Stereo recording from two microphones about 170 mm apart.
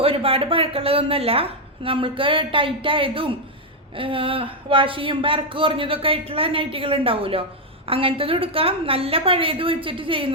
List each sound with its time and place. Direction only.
0.0 s speech: 35° right (ahead or behind)